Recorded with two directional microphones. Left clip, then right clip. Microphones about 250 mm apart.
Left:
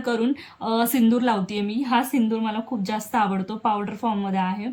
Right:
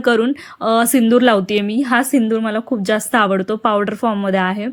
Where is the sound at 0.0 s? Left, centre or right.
Centre.